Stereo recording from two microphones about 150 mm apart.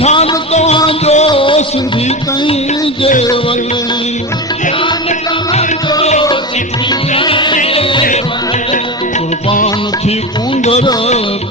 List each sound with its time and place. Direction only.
0.0 s music: 45° left (ahead or behind)
7.1 s music: 35° left (ahead or behind)
10.6 s music: 50° left (ahead or behind)